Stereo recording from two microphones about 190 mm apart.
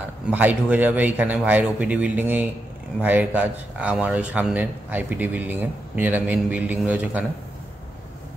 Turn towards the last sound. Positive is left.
turn(degrees=-5)  # may be behind; listen again after turning